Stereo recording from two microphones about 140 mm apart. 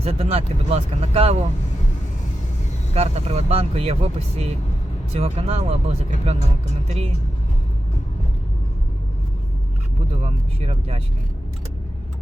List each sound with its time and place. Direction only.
0.0 s speech: 45° right (ahead or behind)
2.9 s speech: 50° right (ahead or behind)
10.1 s speech: 45° right (ahead or behind)